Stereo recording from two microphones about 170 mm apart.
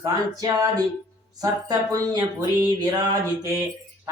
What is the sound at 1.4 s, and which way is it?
A man's voice, 20° right (ahead or behind).